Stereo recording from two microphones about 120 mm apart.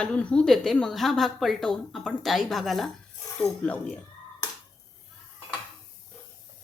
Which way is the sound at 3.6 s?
10° left (ahead or behind).